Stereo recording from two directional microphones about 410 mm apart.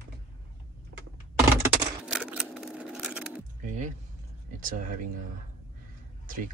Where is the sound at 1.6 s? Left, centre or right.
Centre.